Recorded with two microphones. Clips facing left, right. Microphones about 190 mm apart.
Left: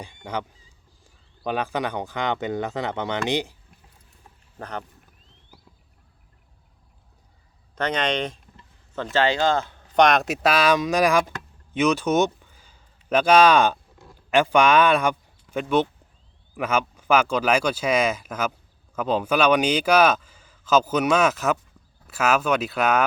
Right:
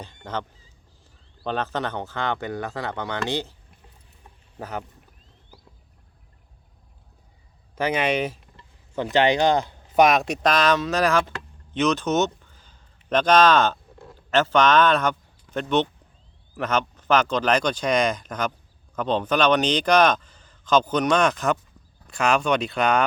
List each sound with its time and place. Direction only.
0.0 s speech: 10° left (ahead or behind)
1.5 s a man's voice: 10° left (ahead or behind)
4.6 s speech: 5° right (ahead or behind)
7.8 s speech: 10° right (ahead or behind)
9.1 s a man's voice: 15° right (ahead or behind); by 23.0 s 5° left (ahead or behind)